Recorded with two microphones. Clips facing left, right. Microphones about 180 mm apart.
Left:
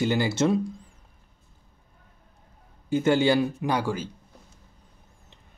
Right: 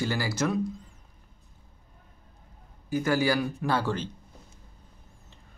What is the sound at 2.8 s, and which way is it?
Speech, 25° left (ahead or behind).